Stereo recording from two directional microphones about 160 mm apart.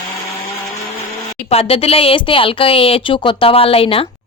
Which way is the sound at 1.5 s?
40° left (ahead or behind).